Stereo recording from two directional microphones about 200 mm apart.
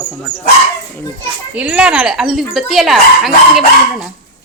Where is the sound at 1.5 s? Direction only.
5° right (ahead or behind).